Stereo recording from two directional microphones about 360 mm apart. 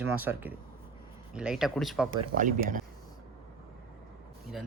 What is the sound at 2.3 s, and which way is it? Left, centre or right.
Speech, right.